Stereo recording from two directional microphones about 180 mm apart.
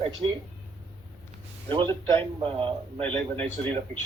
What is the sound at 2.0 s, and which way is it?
Speech, 30° right (ahead or behind).